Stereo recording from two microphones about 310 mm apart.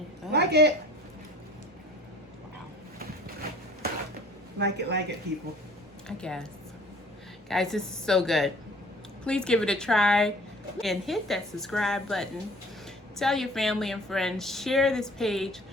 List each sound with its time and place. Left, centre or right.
0.3 s speech: right
4.5 s speech: right
6.1 s a woman's voice: centre
7.4 s a woman's voice: centre